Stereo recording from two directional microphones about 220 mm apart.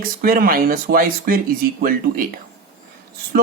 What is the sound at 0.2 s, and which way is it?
Speech, 40° right (ahead or behind).